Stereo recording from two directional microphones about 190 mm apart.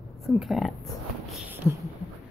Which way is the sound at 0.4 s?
Centre (ahead or behind).